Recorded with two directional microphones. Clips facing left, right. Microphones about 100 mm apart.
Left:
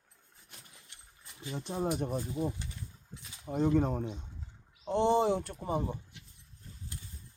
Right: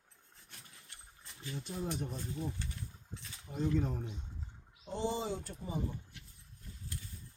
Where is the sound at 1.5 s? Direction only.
70° left (ahead or behind).